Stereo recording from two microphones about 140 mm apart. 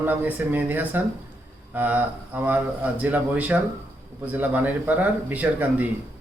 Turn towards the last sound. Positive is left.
turn(degrees=-10)  # may be behind; listen again after turning